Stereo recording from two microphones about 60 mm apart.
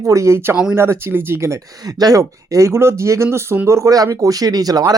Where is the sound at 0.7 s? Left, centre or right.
Right.